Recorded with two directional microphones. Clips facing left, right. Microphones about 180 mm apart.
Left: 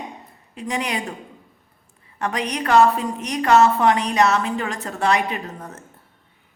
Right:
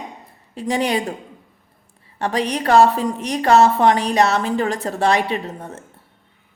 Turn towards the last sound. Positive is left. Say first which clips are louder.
# right 5 dB
turn(degrees=-30)  # may be behind; listen again after turning